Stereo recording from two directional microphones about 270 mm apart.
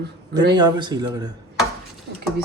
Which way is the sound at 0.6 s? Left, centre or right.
Centre.